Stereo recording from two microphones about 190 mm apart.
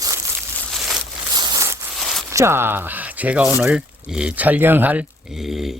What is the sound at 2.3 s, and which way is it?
Speech, 15° right (ahead or behind).